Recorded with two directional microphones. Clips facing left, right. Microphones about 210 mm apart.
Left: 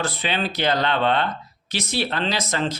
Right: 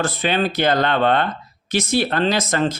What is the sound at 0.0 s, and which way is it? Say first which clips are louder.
Speech: right 5 dB; 45° right (ahead or behind).